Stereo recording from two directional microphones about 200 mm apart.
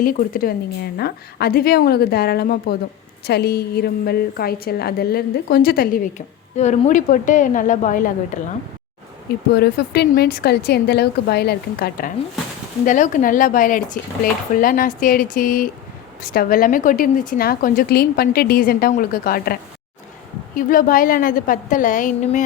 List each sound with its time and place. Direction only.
0.0 s a woman's voice: 45° left (ahead or behind)
9.6 s a woman's voice: 55° left (ahead or behind)
20.6 s a woman's voice: 45° left (ahead or behind)